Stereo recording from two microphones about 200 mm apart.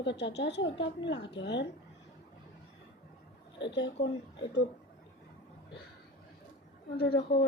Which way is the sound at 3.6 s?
60° left (ahead or behind).